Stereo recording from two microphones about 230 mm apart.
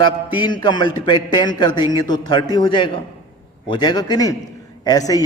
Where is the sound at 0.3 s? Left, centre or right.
Centre.